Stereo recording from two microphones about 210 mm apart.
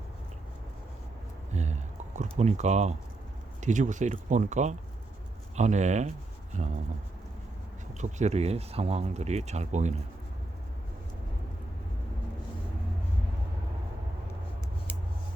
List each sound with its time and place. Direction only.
1.5 s a sound: 35° right (ahead or behind)
3.6 s speech: 35° right (ahead or behind)
7.9 s speech: 35° right (ahead or behind)